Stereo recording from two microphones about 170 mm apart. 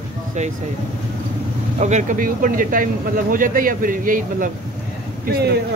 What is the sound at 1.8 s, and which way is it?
Speech, 45° right (ahead or behind).